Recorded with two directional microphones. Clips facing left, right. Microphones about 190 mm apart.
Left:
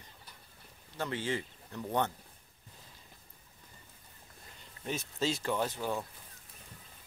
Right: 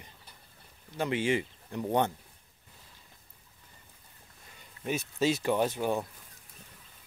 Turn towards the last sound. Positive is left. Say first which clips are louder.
# right 5 dB
turn(degrees=-20)  # may be behind; listen again after turning